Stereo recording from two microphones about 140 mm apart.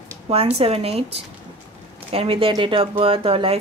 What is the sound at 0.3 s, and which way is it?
Speech, 45° right (ahead or behind).